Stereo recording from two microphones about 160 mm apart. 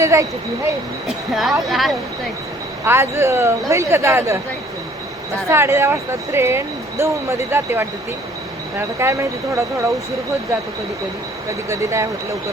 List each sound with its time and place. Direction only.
0.0 s speech: 20° right (ahead or behind)
1.0 s speech: centre (ahead or behind)
2.8 s speech: 15° right (ahead or behind)
5.5 s speech: 15° right (ahead or behind)
9.0 s speech: 20° right (ahead or behind)
11.7 s speech: 20° right (ahead or behind)